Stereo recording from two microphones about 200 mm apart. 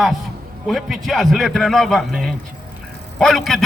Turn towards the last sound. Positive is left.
turn(degrees=0)  # may be behind; listen again after turning